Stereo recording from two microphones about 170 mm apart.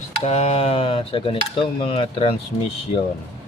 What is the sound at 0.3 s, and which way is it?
Speech, 40° left (ahead or behind).